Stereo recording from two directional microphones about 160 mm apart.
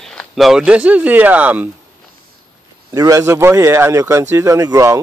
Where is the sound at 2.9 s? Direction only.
20° right (ahead or behind).